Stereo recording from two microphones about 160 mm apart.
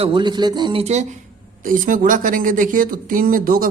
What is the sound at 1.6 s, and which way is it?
Speech, 55° right (ahead or behind).